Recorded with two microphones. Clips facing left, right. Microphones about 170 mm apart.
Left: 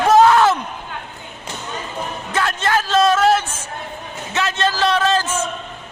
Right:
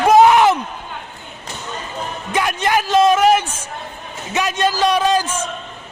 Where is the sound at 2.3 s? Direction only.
15° right (ahead or behind).